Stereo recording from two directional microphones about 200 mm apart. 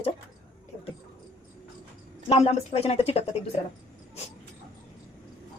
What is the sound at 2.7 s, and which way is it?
Speech, 30° left (ahead or behind).